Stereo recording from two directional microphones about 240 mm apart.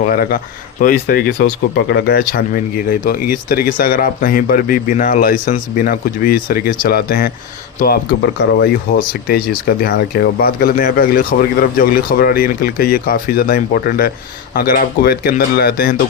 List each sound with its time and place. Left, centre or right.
0.1 s speech: left